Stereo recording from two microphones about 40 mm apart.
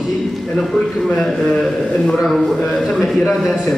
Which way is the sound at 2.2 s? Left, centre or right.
Centre.